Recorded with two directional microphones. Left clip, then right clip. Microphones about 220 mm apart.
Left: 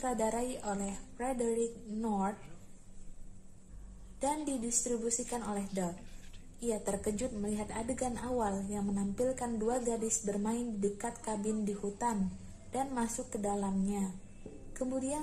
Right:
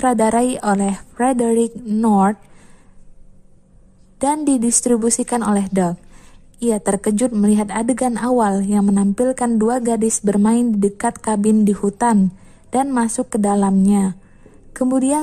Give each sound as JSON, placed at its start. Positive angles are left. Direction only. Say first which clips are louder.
{"t": 0.0, "sound": "a woman's voice", "louder": "right 18 dB", "side_deg": -45}
{"t": 4.2, "sound": "a woman's voice", "louder": "right 17 dB", "side_deg": -45}
{"t": 6.6, "sound": "a woman's voice", "louder": "right 17 dB", "side_deg": -45}